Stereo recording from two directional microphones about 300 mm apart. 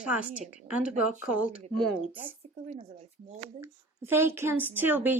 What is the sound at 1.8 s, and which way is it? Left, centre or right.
Speech, centre.